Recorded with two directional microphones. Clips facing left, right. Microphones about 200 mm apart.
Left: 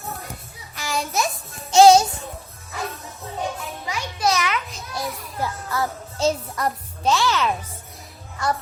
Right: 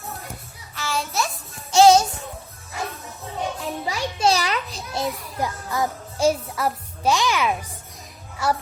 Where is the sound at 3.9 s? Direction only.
30° right (ahead or behind).